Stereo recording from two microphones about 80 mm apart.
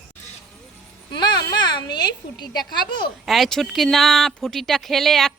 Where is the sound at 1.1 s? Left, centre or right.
Left.